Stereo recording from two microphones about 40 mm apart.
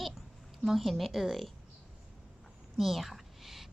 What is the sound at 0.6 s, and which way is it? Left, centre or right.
Speech, centre.